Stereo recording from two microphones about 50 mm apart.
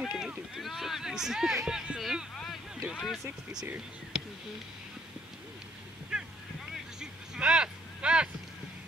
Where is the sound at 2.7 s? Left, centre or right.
Centre.